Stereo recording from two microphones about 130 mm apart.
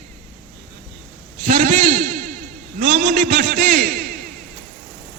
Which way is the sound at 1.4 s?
90° right.